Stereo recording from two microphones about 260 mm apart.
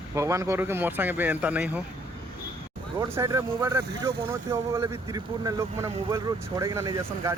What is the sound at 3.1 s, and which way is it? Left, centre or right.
Speech, centre.